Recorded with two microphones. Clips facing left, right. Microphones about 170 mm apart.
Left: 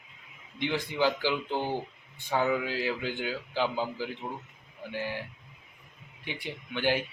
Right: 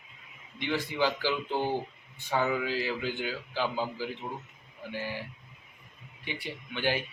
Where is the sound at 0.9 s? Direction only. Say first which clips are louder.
Left 2 dB; 15° left (ahead or behind).